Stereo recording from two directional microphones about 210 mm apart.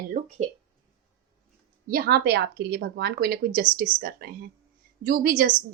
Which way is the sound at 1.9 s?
45° right (ahead or behind).